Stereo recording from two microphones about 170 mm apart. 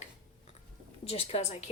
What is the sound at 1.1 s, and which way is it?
Speech, 35° left (ahead or behind).